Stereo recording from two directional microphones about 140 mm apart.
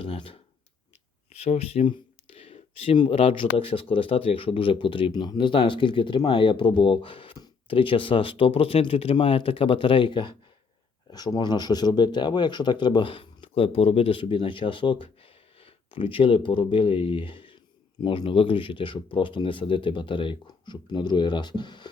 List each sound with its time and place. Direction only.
0.0 s speech: 40° left (ahead or behind)